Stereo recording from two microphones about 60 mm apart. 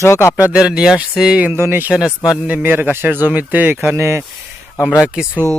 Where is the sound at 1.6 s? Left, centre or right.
Right.